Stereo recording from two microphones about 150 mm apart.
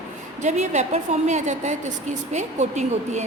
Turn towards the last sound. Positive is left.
turn(degrees=-50)  # may be behind; listen again after turning